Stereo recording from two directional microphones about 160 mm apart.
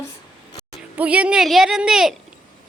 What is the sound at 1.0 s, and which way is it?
A child's voice, 10° right (ahead or behind).